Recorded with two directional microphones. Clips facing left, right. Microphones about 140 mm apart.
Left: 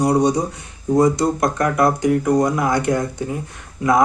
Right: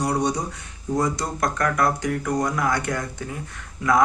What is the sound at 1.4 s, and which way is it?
Speech, 20° left (ahead or behind).